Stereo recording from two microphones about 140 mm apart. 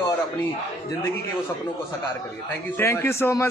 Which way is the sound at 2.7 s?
15° left (ahead or behind).